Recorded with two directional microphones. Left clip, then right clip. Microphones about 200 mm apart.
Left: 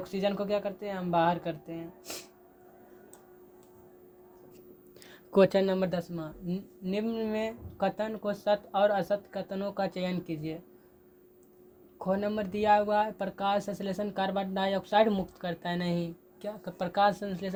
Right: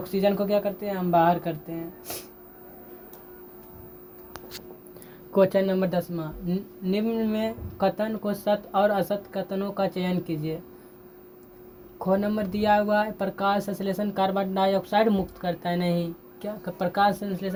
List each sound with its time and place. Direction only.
0.0 s speech: 45° left (ahead or behind)
5.3 s speech: 65° left (ahead or behind); by 10.6 s 45° left (ahead or behind)
11.9 s speech: 45° left (ahead or behind)